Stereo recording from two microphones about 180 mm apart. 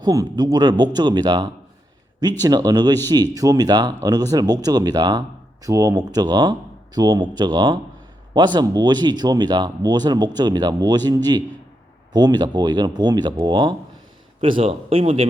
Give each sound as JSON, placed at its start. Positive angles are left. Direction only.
{"t": 0.0, "sound": "a man's voice", "side_deg": -20}